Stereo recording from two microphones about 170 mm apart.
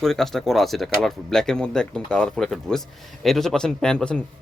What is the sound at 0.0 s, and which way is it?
Speech, centre (ahead or behind).